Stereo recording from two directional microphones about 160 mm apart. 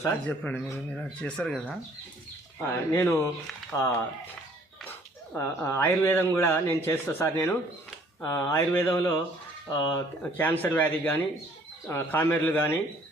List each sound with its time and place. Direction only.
0.0 s speech: 10° left (ahead or behind)
2.9 s speech: 15° left (ahead or behind)